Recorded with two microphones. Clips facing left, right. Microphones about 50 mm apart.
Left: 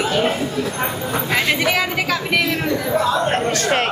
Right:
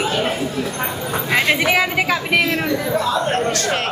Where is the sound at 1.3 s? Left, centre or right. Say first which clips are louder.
Right 3 dB; centre.